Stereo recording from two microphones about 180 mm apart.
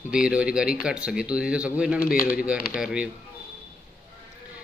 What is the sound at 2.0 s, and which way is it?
Speech, 55° left (ahead or behind).